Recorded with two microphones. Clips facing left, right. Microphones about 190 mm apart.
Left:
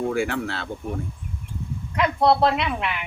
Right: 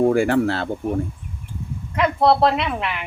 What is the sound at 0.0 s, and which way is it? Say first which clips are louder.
Speech: right 8 dB; 45° right (ahead or behind).